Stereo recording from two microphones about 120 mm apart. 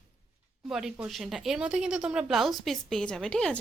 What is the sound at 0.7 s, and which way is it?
Speech, 5° right (ahead or behind).